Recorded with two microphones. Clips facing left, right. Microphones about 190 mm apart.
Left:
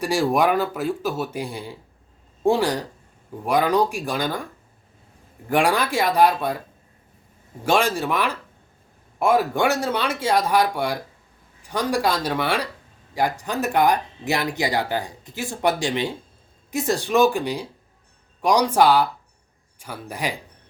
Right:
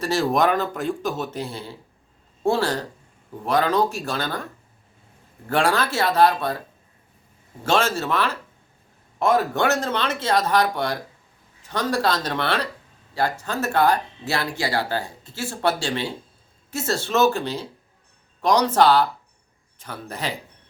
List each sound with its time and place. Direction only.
0.0 s speech: 10° left (ahead or behind)
5.5 s speech: 15° left (ahead or behind)
7.6 s speech: 15° left (ahead or behind)